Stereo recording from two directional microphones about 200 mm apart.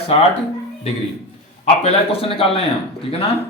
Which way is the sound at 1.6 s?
30° left (ahead or behind).